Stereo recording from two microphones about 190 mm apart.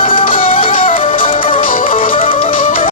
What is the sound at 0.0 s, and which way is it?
Music, 25° left (ahead or behind).